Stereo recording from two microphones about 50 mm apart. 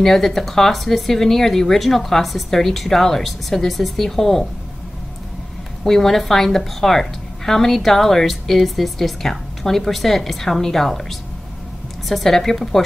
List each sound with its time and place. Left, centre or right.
0.0 s a woman's voice: centre
5.9 s a woman's voice: centre